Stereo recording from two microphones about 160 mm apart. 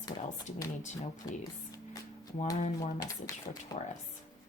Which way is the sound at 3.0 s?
25° left (ahead or behind).